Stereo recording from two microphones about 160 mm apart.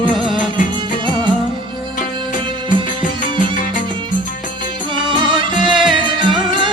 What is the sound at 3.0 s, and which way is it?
Music, 55° left (ahead or behind).